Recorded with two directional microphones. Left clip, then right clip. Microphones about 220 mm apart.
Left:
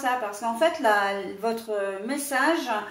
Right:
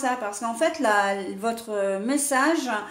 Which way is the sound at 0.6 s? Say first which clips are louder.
Even; 45° right (ahead or behind).